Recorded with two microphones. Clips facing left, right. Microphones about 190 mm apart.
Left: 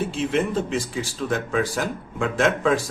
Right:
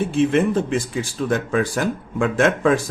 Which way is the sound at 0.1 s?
55° right (ahead or behind).